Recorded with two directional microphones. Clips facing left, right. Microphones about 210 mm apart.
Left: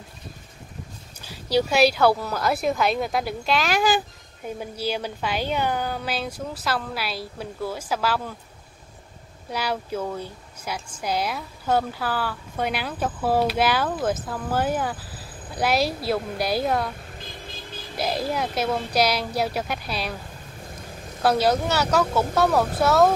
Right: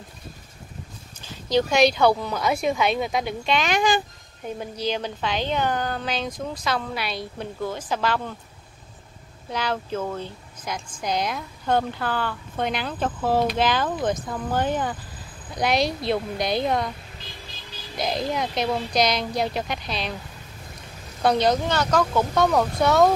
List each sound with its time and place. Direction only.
1.2 s speech: 10° left (ahead or behind)
9.5 s speech: 10° left (ahead or behind)
17.2 s vehicle: 50° left (ahead or behind)
17.9 s speech: 5° left (ahead or behind)
21.2 s speech: 5° left (ahead or behind)